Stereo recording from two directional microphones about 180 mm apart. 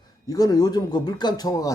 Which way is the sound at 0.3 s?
20° left (ahead or behind).